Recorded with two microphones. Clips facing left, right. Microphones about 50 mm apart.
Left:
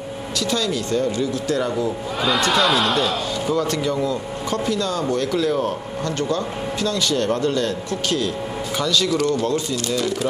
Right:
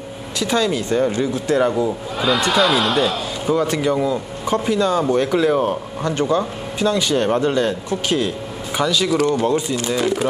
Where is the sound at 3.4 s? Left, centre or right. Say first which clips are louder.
Right 4 dB; centre.